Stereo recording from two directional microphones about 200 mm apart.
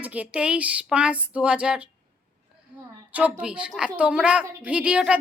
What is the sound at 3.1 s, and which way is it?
A woman's voice, 5° right (ahead or behind).